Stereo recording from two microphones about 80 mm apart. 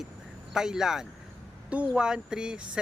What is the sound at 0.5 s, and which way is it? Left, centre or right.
Speech, centre.